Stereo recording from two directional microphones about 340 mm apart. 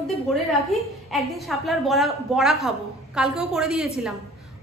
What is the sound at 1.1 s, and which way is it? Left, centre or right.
A woman's voice, centre.